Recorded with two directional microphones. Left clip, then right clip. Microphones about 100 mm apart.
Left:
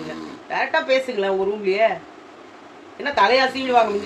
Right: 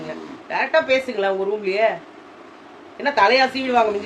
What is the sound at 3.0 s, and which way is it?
Speech, 30° right (ahead or behind).